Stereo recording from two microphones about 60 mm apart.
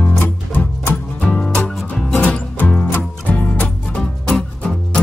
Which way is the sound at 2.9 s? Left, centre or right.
Left.